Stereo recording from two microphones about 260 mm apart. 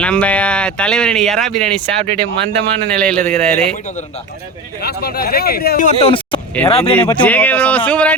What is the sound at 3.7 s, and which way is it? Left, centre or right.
A man's voice, left.